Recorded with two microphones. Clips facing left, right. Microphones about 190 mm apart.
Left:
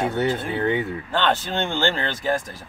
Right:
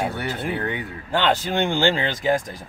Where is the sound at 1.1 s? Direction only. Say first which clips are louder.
Right 2 dB; 10° right (ahead or behind).